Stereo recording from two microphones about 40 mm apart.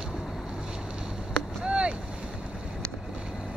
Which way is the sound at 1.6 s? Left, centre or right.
Right.